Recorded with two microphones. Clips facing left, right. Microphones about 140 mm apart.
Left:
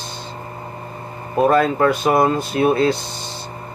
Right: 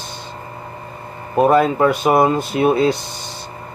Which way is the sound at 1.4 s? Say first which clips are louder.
Right 2 dB; 15° right (ahead or behind).